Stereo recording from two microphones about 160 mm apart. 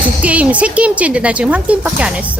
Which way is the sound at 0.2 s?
10° right (ahead or behind).